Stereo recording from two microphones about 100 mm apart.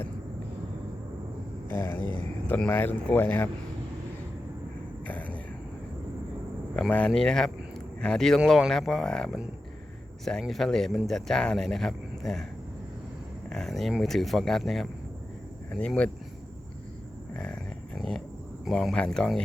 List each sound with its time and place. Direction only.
1.7 s speech: 20° left (ahead or behind)
5.0 s a sound: 15° left (ahead or behind)
6.7 s speech: 10° left (ahead or behind)
13.5 s speech: 5° left (ahead or behind)
17.3 s a sound: 10° left (ahead or behind)
18.6 s speech: 5° left (ahead or behind)